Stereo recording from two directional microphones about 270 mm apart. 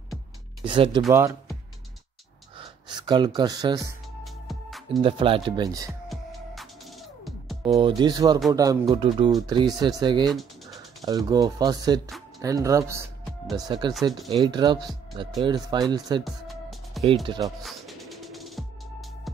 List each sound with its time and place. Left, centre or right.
0.7 s speech: centre
2.5 s a sound: centre
4.2 s music: centre
5.0 s speech: centre
6.0 s music: centre
7.6 s speech: centre
10.3 s a sound: centre
11.1 s speech: centre
17.6 s music: centre